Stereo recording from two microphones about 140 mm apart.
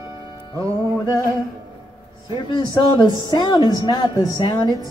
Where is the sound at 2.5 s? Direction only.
35° left (ahead or behind).